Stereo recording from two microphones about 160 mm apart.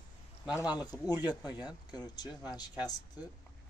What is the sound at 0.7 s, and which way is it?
Speech, 25° left (ahead or behind).